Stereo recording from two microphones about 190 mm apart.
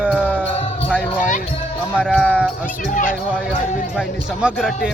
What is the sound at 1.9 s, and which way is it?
Music, centre (ahead or behind).